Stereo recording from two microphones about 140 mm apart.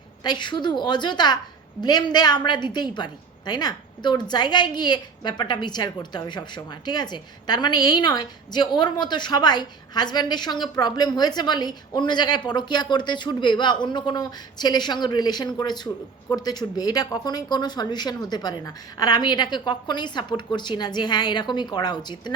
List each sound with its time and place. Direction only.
0.2 s a woman's voice: 30° left (ahead or behind)